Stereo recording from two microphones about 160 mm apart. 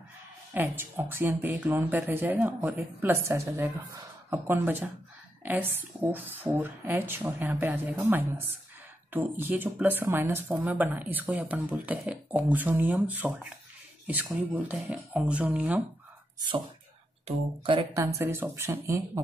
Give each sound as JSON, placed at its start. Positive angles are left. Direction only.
{"t": 0.6, "sound": "speech", "side_deg": -15}
{"t": 16.3, "sound": "speech", "side_deg": -30}
{"t": 17.9, "sound": "speech", "side_deg": -20}